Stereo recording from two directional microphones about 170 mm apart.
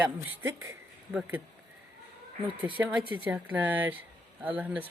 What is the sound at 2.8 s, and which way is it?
Speech, 15° right (ahead or behind).